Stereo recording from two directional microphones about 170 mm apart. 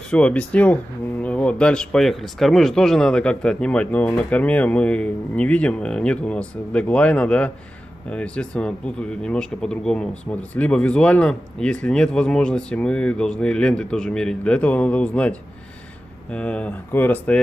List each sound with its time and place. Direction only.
0.1 s speech: 5° left (ahead or behind)